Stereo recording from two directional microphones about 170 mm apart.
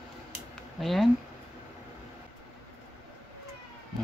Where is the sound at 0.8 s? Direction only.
Centre (ahead or behind).